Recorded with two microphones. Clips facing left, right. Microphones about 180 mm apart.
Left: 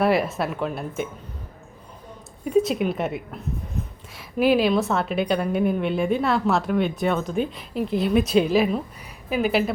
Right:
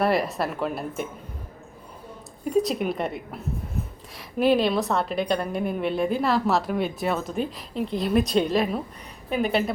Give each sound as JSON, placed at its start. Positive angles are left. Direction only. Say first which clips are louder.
{"t": 0.0, "sound": "a woman's voice", "louder": "left 2 dB", "side_deg": 0}
{"t": 2.4, "sound": "a woman's voice", "louder": "left 2 dB", "side_deg": 0}